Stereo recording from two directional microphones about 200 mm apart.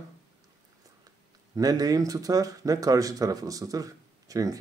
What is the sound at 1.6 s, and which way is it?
Speech, 20° right (ahead or behind).